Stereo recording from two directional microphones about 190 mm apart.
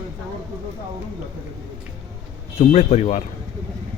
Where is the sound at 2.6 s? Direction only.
35° left (ahead or behind).